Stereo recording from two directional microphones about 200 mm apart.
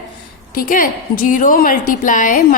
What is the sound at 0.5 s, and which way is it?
A woman's voice, 45° left (ahead or behind).